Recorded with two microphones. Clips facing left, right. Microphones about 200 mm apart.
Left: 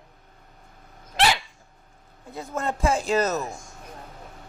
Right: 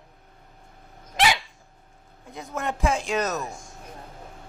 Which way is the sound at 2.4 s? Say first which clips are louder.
Left 1 dB; centre (ahead or behind).